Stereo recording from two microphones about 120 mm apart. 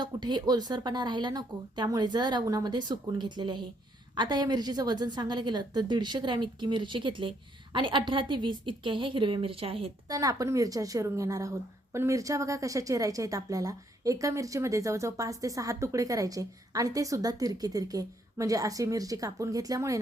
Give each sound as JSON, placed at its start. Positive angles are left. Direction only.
{"t": 0.0, "sound": "a woman's voice", "side_deg": -40}
{"t": 10.1, "sound": "a woman's voice", "side_deg": -30}